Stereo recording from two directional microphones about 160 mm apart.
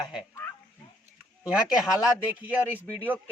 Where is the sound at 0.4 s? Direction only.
10° left (ahead or behind).